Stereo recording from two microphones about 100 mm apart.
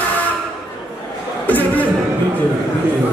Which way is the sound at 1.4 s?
15° left (ahead or behind).